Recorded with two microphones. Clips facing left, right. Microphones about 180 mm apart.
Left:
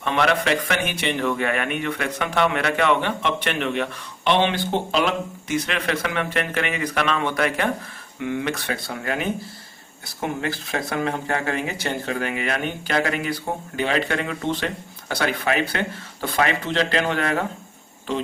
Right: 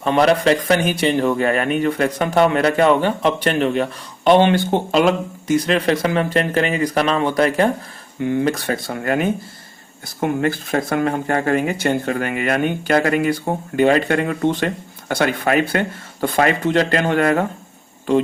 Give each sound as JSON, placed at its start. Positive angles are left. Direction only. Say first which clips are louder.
{"t": 0.0, "sound": "speech", "louder": "right 6 dB", "side_deg": -35}
{"t": 10.2, "sound": "speech", "louder": "right 7 dB", "side_deg": -55}